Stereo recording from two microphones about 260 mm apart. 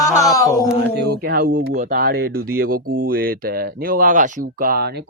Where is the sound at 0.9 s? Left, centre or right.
Right.